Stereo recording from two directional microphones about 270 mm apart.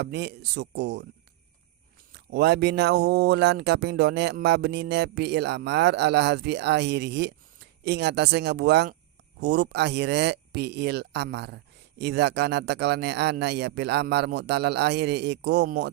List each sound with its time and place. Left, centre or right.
0.0 s speech: right
2.1 s speech: right